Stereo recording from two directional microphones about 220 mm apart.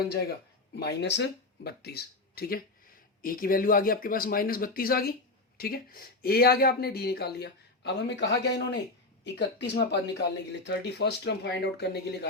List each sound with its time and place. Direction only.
0.1 s speech: 45° left (ahead or behind)